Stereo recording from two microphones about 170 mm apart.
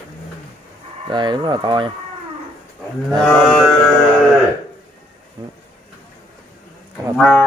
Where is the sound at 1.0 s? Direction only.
25° right (ahead or behind).